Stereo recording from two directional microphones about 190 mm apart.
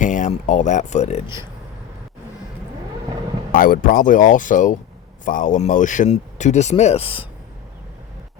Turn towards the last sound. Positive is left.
turn(degrees=30)  # may be behind; listen again after turning